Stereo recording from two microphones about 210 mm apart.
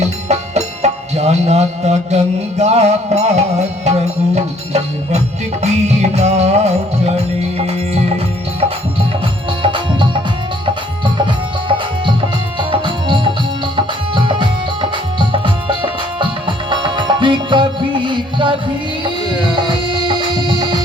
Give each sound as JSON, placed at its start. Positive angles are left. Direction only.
{"t": 0.0, "sound": "music", "side_deg": -30}
{"t": 9.6, "sound": "music", "side_deg": -25}
{"t": 19.9, "sound": "music", "side_deg": -25}